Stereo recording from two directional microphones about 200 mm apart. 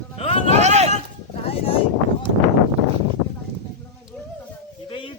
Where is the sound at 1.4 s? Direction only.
30° left (ahead or behind).